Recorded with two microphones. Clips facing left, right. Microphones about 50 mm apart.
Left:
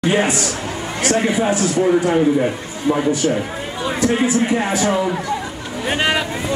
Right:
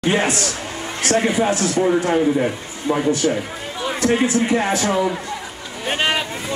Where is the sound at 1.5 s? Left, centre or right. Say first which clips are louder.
Left 2 dB; centre.